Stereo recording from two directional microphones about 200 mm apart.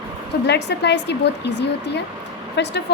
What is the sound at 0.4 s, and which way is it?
A woman's voice, 60° left (ahead or behind).